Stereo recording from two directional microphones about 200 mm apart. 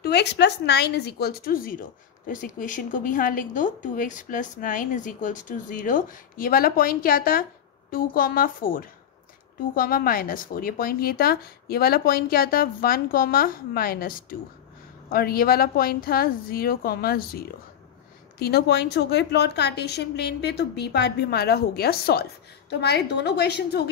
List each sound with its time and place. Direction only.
0.0 s a woman's voice: 55° left (ahead or behind)